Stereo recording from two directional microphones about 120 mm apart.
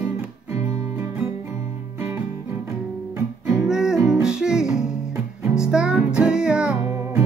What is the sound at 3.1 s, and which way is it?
Guitar, 25° right (ahead or behind).